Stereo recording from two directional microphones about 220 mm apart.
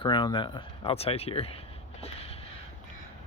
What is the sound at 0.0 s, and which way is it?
Speech, 20° left (ahead or behind).